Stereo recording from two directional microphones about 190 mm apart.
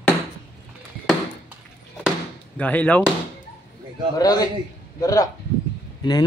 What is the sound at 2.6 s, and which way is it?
Speech, 5° left (ahead or behind).